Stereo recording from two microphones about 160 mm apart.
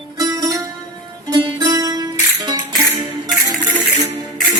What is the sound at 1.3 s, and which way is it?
Music, 20° right (ahead or behind).